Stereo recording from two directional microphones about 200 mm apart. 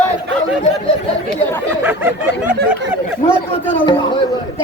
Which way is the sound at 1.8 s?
10° right (ahead or behind).